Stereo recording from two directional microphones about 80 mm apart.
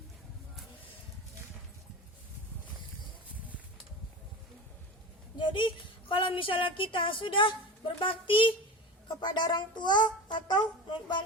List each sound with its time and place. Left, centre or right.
5.4 s a woman's voice: left
9.0 s a child's voice: left